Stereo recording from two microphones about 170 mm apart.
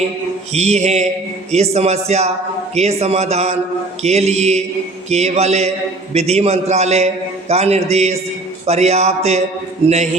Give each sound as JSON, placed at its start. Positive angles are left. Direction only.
{"t": 0.5, "sound": "a man's voice", "side_deg": -40}